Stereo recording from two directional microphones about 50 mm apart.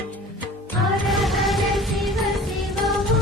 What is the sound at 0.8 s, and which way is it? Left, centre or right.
Music, centre.